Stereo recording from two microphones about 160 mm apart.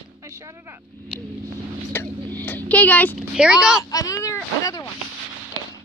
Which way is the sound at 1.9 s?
10° left (ahead or behind).